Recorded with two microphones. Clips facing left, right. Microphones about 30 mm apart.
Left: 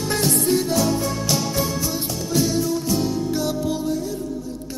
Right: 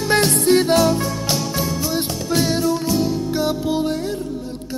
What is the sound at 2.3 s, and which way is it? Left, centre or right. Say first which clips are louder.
Music: right 2 dB; right.